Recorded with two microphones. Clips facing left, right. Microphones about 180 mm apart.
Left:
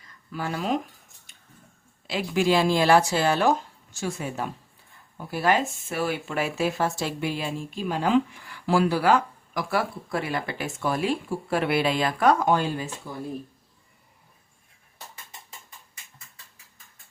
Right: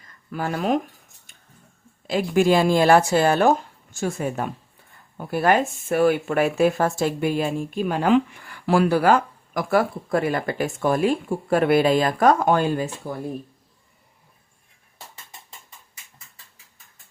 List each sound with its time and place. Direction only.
0.3 s speech: 50° right (ahead or behind)
2.0 s speech: 50° right (ahead or behind)